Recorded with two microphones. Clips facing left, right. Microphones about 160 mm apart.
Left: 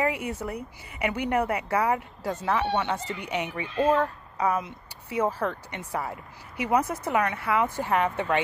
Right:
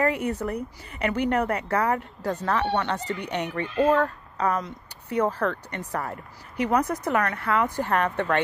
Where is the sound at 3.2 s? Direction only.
10° left (ahead or behind).